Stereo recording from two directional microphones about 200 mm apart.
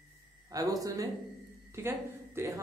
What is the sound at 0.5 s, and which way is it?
A woman's voice, 15° right (ahead or behind).